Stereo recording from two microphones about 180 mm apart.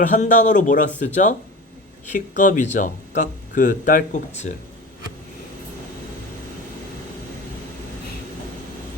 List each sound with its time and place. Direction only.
0.0 s speech: 45° left (ahead or behind)